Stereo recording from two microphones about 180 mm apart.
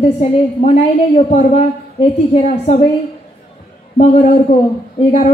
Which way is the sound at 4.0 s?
35° left (ahead or behind).